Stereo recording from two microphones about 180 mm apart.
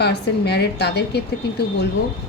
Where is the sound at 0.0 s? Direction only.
70° left (ahead or behind).